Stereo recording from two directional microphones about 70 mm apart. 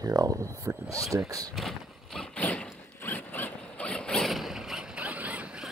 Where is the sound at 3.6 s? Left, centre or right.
Centre.